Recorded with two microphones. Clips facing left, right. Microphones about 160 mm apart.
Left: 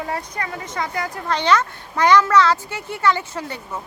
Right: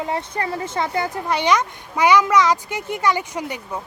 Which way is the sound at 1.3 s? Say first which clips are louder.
Left 2 dB; 10° right (ahead or behind).